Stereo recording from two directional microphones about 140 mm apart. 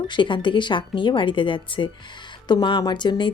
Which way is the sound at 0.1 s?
35° left (ahead or behind).